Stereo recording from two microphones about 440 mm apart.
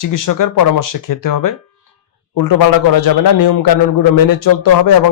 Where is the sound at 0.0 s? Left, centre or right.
Left.